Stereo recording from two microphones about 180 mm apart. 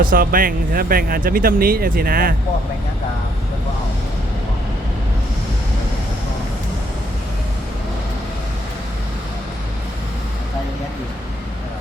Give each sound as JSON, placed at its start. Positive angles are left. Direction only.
{"t": 0.0, "sound": "speech", "side_deg": -50}